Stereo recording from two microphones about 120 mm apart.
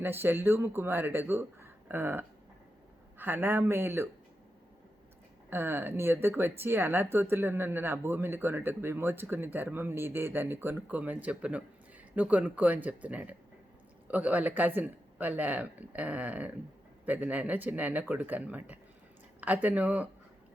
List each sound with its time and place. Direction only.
0.0 s speech: 20° right (ahead or behind)
5.5 s speech: 20° right (ahead or behind)